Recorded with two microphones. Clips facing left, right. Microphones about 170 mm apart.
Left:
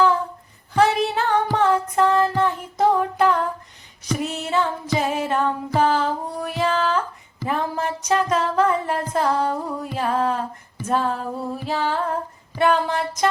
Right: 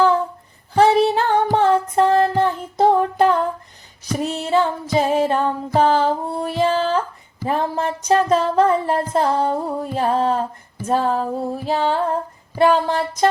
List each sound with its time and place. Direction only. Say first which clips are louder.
0.8 s music: right 4 dB; 35° right (ahead or behind)